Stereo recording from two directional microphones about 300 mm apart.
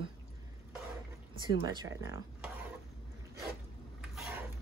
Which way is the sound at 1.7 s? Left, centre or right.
Centre.